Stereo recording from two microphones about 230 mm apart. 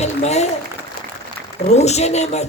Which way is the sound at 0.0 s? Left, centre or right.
Left.